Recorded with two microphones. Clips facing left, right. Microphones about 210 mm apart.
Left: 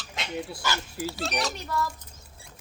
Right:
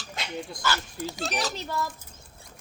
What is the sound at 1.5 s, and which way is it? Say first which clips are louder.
Speech: left 1 dB; 25° right (ahead or behind).